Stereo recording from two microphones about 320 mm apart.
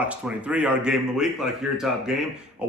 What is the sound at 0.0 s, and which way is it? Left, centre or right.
Speech, centre.